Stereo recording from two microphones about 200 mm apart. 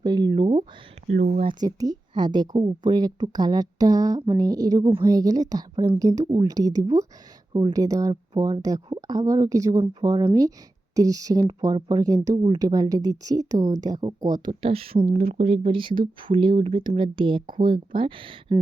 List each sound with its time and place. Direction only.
0.0 s speech: 20° right (ahead or behind)
1.0 s speech: 40° right (ahead or behind)
1.5 s speech: 20° right (ahead or behind)